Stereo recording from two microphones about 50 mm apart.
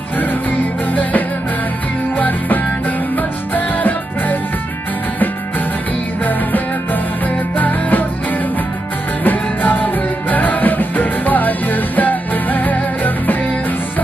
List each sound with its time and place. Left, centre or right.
0.8 s music: left
6.2 s music: left